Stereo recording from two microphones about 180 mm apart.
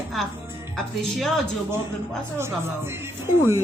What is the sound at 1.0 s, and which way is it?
Speech, centre (ahead or behind).